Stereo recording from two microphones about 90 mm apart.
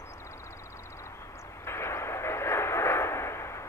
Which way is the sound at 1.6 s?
30° left (ahead or behind).